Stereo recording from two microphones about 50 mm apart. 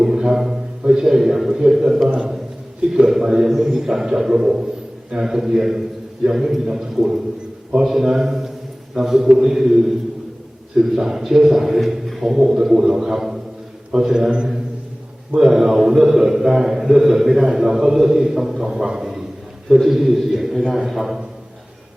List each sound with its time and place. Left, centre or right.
0.0 s a man's voice: centre
2.0 s a man's voice: centre